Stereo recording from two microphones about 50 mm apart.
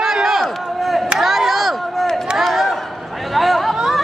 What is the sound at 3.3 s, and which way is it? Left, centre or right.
Chatter, centre.